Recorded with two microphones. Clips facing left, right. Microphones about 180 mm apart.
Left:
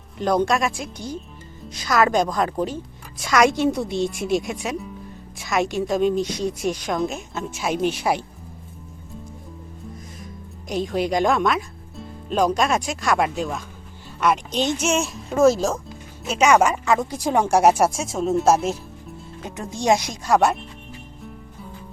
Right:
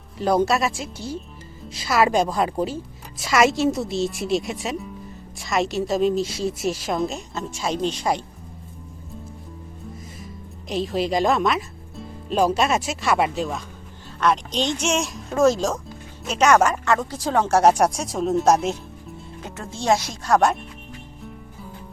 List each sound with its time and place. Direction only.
0.2 s a woman's voice: 5° right (ahead or behind)
10.7 s a woman's voice: centre (ahead or behind)
19.4 s speech: 15° left (ahead or behind)